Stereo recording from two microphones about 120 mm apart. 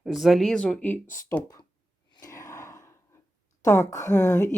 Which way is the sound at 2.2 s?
25° left (ahead or behind).